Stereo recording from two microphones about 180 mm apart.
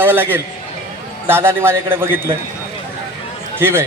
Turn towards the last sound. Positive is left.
turn(degrees=-15)  # may be behind; listen again after turning